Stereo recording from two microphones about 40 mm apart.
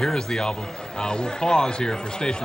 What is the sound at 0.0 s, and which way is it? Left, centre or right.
Speech, centre.